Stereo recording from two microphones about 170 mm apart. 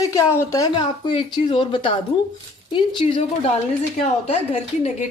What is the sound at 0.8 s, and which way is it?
A woman's voice, 30° left (ahead or behind).